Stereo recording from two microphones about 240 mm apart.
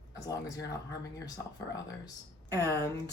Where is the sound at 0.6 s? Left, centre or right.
Left.